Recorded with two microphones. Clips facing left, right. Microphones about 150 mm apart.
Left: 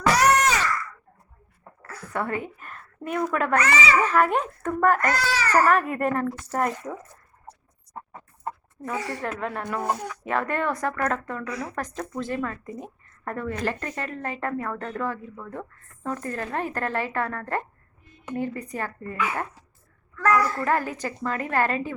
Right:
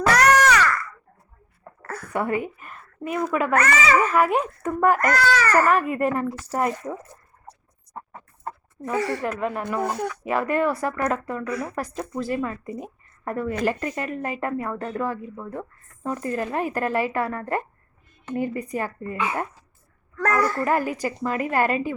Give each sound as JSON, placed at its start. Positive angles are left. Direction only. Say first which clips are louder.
{"t": 0.1, "sound": "a sound", "louder": "right 2 dB", "side_deg": -70}
{"t": 1.8, "sound": "a sound", "louder": "right 6 dB", "side_deg": -55}
{"t": 2.1, "sound": "a woman's voice", "louder": "right 3 dB", "side_deg": -15}
{"t": 3.5, "sound": "speech", "louder": "right 2 dB", "side_deg": -50}
{"t": 4.0, "sound": "a woman's voice", "louder": "right 1 dB", "side_deg": -5}
{"t": 4.9, "sound": "speech", "louder": "right 4 dB", "side_deg": -50}
{"t": 5.6, "sound": "a child's voice", "louder": "right 1 dB", "side_deg": 0}
{"t": 9.0, "sound": "speech", "louder": "right 8 dB", "side_deg": -65}
{"t": 9.2, "sound": "a child's voice", "louder": "right 3 dB", "side_deg": -5}
{"t": 11.4, "sound": "speech", "louder": "right 4 dB", "side_deg": -55}
{"t": 11.9, "sound": "a woman's voice", "louder": "right 3 dB", "side_deg": -10}
{"t": 20.1, "sound": "a child's voice", "louder": "left 2 dB", "side_deg": -40}
{"t": 20.7, "sound": "a woman's voice", "louder": "right 2 dB", "side_deg": -10}